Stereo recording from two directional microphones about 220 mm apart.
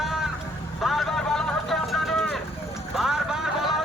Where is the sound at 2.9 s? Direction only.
Centre (ahead or behind).